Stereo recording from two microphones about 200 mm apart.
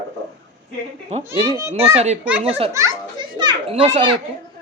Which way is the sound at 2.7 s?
20° right (ahead or behind).